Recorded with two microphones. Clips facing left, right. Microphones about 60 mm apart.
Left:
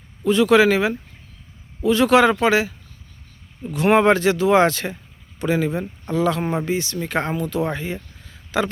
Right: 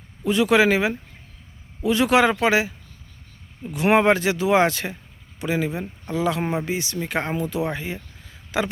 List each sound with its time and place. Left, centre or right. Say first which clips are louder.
0.3 s speech: left 3 dB; centre